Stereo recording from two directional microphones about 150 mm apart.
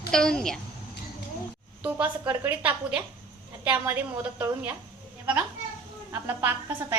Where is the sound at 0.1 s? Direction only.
5° left (ahead or behind).